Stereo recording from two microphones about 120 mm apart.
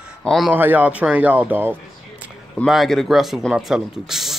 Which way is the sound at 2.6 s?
Centre (ahead or behind).